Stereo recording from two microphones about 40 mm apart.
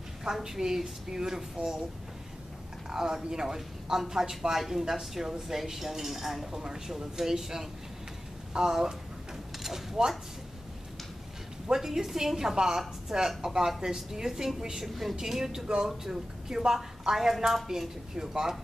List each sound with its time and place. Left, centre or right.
0.2 s a woman's voice: centre
2.9 s a woman's voice: centre
11.6 s a woman's voice: centre